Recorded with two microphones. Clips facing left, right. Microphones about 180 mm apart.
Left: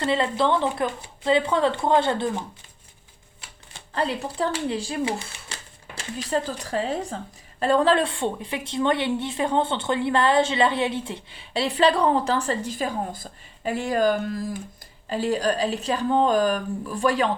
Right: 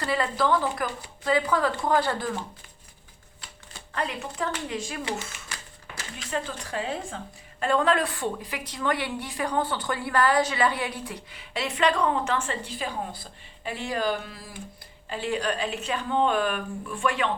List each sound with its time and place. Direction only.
0.0 s a woman's voice: 25° left (ahead or behind)
3.9 s a woman's voice: 30° left (ahead or behind)